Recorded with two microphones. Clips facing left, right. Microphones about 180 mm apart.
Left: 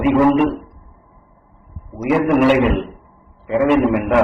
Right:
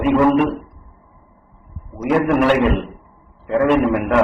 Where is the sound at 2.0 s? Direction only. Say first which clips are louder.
Left 2 dB; 10° left (ahead or behind).